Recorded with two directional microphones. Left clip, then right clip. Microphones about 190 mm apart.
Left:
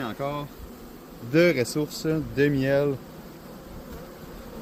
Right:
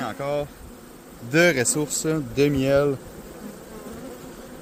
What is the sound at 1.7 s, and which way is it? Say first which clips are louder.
Speech: right 2 dB; 50° right (ahead or behind).